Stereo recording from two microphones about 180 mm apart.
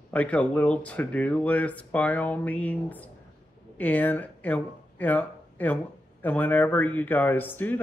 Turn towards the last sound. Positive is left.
turn(degrees=10)  # may be behind; listen again after turning